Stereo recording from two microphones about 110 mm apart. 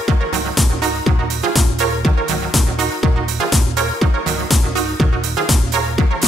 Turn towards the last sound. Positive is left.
turn(degrees=0)  # may be behind; listen again after turning